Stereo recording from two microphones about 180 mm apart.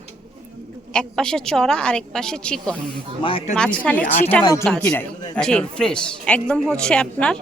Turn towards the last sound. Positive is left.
turn(degrees=5)  # may be behind; listen again after turning